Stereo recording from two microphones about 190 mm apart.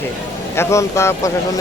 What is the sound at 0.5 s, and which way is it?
Speech, 15° left (ahead or behind).